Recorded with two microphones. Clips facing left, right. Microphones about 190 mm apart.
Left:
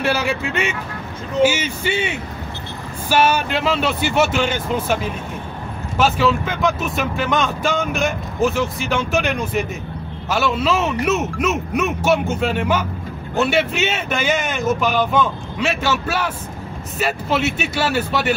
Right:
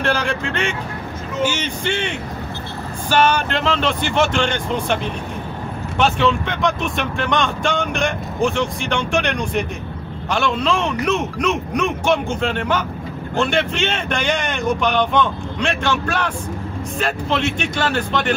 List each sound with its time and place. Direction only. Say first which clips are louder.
0.0 s speech: left 1 dB; 5° left (ahead or behind)